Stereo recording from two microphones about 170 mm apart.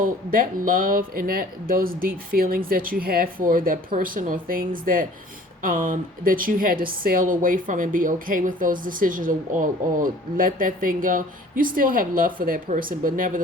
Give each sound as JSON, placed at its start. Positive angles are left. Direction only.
{"t": 0.0, "sound": "a woman's voice", "side_deg": -55}